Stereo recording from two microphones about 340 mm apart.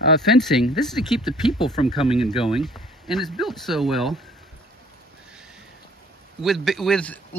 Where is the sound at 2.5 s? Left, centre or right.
Centre.